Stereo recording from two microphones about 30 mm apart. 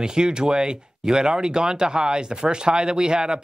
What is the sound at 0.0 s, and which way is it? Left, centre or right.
Speech, right.